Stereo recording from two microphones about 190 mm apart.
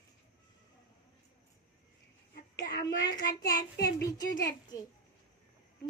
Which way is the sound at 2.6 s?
60° left (ahead or behind).